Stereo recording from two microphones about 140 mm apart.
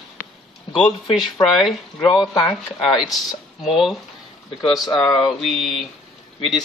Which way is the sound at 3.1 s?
Centre (ahead or behind).